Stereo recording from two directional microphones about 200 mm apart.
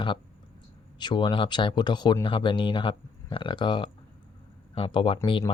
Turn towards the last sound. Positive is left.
turn(degrees=25)  # may be behind; listen again after turning